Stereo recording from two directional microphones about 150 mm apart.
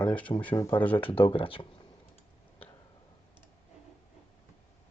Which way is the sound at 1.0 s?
35° left (ahead or behind).